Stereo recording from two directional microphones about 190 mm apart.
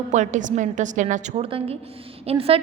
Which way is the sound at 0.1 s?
40° right (ahead or behind).